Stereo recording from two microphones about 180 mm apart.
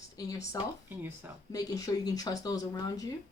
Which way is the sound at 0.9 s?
10° right (ahead or behind).